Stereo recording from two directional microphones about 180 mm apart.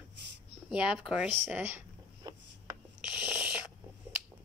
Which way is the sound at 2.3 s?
20° right (ahead or behind).